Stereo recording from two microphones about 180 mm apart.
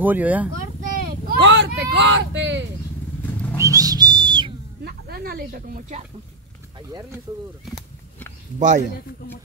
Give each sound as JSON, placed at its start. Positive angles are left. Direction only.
{"t": 0.0, "sound": "speech", "side_deg": -10}
{"t": 0.6, "sound": "vehicle", "side_deg": -50}
{"t": 3.5, "sound": "whistle", "side_deg": -20}
{"t": 4.8, "sound": "snake", "side_deg": -60}
{"t": 6.9, "sound": "speech", "side_deg": -15}
{"t": 8.5, "sound": "speech", "side_deg": -45}